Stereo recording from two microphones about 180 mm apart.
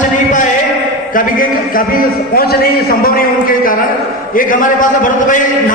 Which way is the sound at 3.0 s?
50° left (ahead or behind).